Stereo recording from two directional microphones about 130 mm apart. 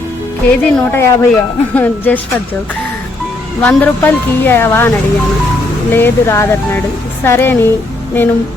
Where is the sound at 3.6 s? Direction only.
10° left (ahead or behind).